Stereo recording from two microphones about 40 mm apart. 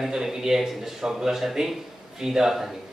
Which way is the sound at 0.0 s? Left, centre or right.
Centre.